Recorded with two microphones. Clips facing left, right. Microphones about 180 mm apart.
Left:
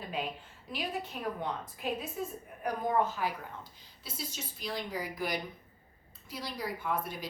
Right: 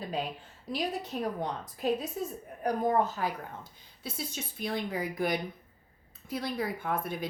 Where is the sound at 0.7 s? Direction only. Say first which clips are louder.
Right 4 dB; 40° right (ahead or behind).